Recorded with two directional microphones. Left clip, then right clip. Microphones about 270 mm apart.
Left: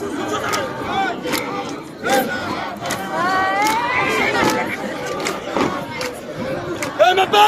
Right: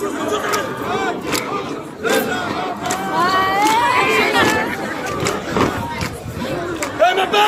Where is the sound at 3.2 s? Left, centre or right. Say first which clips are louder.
Right 1 dB; right.